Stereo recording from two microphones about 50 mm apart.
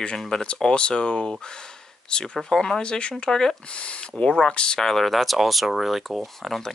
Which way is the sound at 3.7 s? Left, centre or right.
Left.